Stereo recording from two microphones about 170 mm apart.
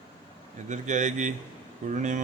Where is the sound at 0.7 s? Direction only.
45° right (ahead or behind).